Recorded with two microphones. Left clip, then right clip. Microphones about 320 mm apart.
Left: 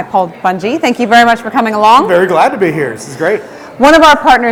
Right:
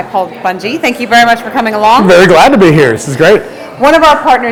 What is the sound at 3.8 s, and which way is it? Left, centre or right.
Speech, left.